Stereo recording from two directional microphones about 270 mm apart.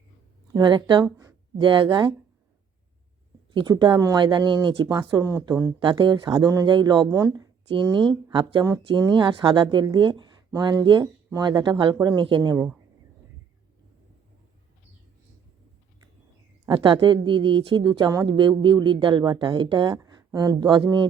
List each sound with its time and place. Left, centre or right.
0.5 s speech: centre
3.5 s speech: centre
16.6 s speech: centre